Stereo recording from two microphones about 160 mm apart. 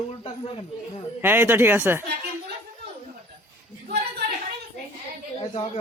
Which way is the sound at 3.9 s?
85° right.